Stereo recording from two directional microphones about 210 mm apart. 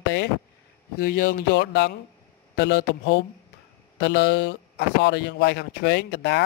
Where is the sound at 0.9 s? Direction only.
45° left (ahead or behind).